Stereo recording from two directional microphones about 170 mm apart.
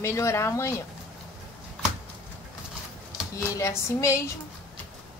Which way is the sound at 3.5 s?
15° left (ahead or behind).